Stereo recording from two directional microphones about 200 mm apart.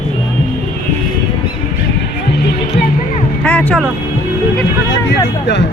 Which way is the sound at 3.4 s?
10° left (ahead or behind).